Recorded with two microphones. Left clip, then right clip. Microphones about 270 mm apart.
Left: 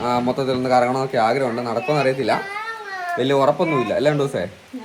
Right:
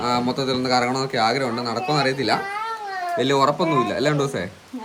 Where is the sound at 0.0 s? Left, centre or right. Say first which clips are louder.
Left 2 dB; centre.